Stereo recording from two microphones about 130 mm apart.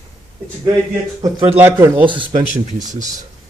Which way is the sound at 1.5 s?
15° right (ahead or behind).